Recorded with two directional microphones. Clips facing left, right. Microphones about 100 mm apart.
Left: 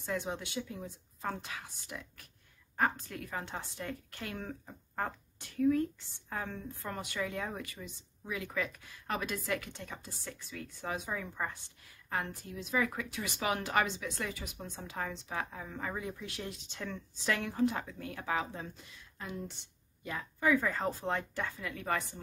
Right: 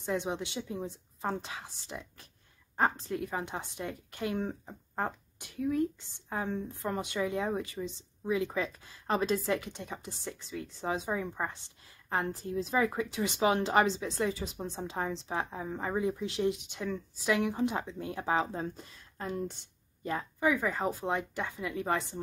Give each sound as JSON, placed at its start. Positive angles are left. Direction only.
{"t": 0.0, "sound": "a woman's voice", "side_deg": -20}
{"t": 19.1, "sound": "speech", "side_deg": -45}
{"t": 20.3, "sound": "speech", "side_deg": -15}